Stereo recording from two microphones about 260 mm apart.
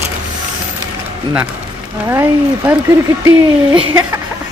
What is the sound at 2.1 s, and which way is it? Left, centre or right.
Speech, centre.